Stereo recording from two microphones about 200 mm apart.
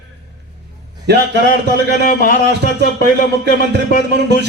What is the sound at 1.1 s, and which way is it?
Speech, 55° right (ahead or behind).